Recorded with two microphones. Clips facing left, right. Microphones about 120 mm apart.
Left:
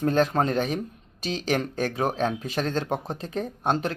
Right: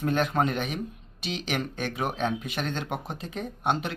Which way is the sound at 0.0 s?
35° left (ahead or behind).